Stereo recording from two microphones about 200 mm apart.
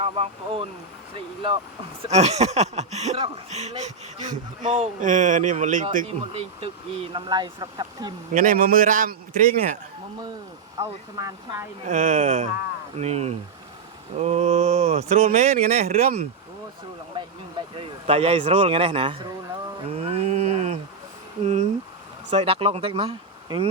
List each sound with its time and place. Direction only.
0.0 s speech: 30° right (ahead or behind)
6.1 s speech: 30° right (ahead or behind)
8.3 s a man's voice: 40° right (ahead or behind)
10.8 s speech: 15° right (ahead or behind)
11.9 s speech: 40° right (ahead or behind)
17.7 s speech: 30° right (ahead or behind)
19.9 s a sound: 30° right (ahead or behind)
21.4 s speech: 35° right (ahead or behind)